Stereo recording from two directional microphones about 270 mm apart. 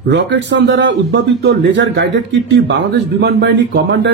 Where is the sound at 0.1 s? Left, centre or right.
Right.